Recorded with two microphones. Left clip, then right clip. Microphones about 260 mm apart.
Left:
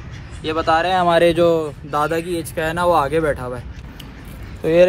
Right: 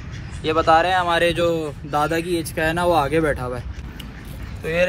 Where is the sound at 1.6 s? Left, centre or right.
Centre.